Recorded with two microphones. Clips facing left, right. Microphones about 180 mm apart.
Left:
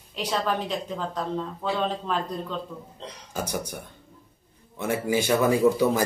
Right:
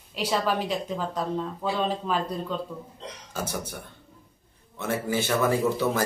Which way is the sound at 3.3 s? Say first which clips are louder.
Left 2 dB; 15° left (ahead or behind).